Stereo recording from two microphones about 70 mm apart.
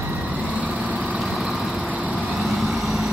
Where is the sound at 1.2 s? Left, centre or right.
Centre.